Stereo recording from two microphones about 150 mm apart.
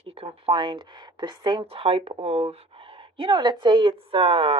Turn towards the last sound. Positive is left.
turn(degrees=-35)  # may be behind; listen again after turning